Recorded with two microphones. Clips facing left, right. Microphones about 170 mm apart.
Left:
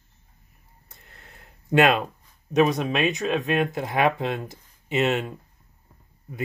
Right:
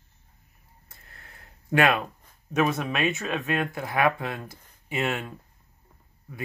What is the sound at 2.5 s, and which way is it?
Speech, 20° left (ahead or behind).